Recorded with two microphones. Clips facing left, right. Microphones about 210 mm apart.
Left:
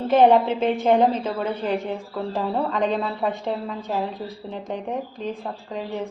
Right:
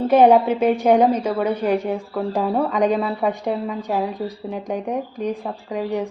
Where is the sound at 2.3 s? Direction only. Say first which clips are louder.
Right 4 dB; 15° right (ahead or behind).